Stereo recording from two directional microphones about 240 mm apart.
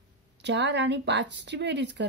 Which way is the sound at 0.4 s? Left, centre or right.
Right.